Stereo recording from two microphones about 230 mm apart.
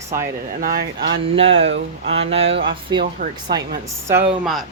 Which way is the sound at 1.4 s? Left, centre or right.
Right.